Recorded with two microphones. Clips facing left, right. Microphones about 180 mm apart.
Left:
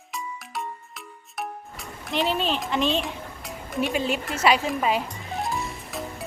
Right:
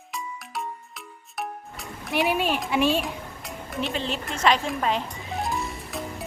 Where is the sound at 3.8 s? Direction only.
10° left (ahead or behind).